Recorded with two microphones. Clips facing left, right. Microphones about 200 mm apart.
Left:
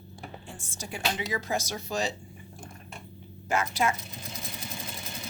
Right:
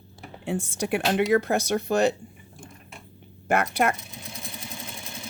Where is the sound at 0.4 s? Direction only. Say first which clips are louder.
Right 14 dB; 65° right (ahead or behind).